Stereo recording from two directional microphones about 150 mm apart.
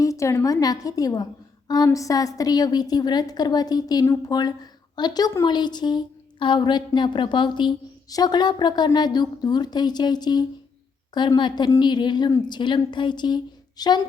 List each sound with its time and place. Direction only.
0.0 s a woman's voice: 20° left (ahead or behind)